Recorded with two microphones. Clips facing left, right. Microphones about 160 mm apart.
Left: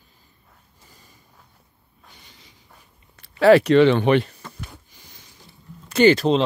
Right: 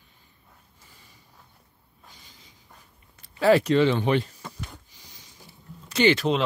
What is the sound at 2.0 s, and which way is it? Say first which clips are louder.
Snort: left 2 dB; 65° left (ahead or behind).